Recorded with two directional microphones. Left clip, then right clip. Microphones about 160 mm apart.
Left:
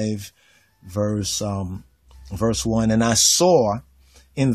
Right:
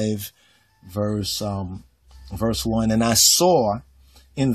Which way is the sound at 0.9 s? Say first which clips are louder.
Left 1 dB; 20° left (ahead or behind).